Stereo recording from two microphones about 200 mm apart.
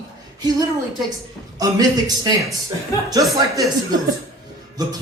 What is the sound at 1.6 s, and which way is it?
Speech, 20° right (ahead or behind).